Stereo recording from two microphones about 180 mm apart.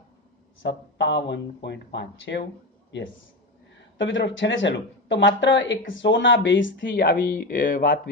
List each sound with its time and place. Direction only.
0.9 s speech: 75° left (ahead or behind)
3.9 s speech: 90° left; by 7.9 s 50° left (ahead or behind)